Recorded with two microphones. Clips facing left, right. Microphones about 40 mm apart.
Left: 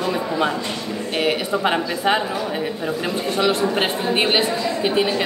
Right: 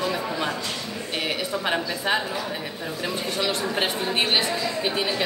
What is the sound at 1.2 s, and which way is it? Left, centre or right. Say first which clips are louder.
Speech: left 7 dB; centre.